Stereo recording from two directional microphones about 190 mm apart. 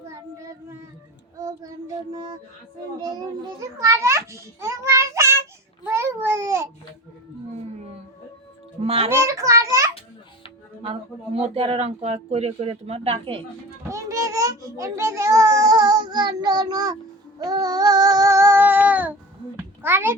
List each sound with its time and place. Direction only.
1.4 s child singing: 20° right (ahead or behind)
3.0 s a child's voice: 20° right (ahead or behind)
5.8 s babbling: 15° right (ahead or behind)
8.8 s speech: 30° right (ahead or behind)
9.0 s a child's voice: 15° right (ahead or behind)
11.3 s speech: 30° right (ahead or behind)
13.9 s a child's voice: 15° right (ahead or behind)
17.4 s child singing: 20° right (ahead or behind)
19.5 s a child's voice: 10° right (ahead or behind)